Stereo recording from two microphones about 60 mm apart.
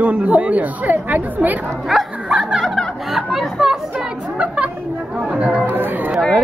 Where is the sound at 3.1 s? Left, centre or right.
Centre.